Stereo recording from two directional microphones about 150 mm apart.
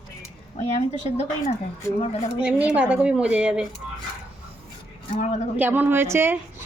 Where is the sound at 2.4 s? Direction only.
10° right (ahead or behind).